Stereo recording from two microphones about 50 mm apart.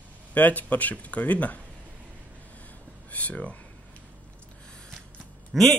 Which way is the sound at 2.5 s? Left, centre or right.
Left.